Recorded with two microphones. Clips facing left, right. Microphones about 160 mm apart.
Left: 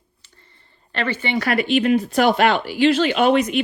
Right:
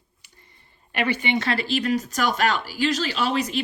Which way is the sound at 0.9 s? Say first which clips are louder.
Even; 15° right (ahead or behind).